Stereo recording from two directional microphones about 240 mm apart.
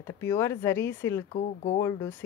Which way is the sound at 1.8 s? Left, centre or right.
Centre.